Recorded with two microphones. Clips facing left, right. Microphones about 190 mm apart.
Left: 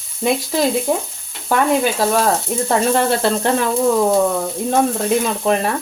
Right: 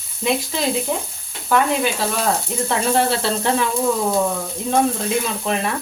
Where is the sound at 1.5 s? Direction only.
45° left (ahead or behind).